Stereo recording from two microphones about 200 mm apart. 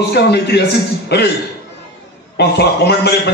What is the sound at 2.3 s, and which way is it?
Speech, 55° left (ahead or behind).